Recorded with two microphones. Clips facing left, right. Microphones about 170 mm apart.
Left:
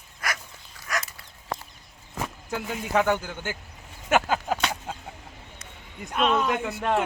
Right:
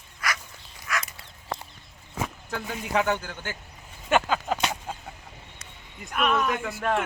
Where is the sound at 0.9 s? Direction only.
40° left (ahead or behind).